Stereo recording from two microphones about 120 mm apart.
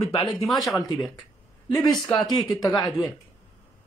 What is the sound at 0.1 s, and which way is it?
Speech, 45° left (ahead or behind).